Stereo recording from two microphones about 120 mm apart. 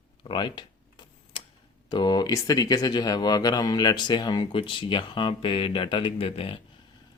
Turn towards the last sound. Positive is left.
turn(degrees=50)  # may be behind; listen again after turning